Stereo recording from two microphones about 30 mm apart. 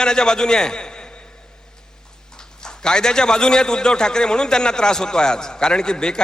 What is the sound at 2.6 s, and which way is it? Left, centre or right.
A man's voice, left.